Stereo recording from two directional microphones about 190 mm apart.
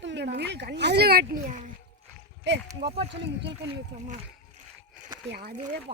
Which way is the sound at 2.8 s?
30° right (ahead or behind).